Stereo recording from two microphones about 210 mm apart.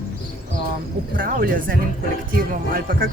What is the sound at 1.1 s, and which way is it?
Speech, 40° right (ahead or behind).